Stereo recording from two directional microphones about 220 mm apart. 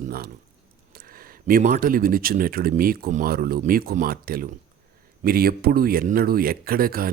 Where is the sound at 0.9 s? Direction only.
40° right (ahead or behind).